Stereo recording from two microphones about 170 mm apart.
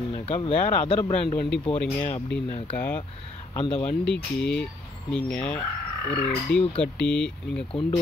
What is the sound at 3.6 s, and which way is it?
Speech, 25° left (ahead or behind).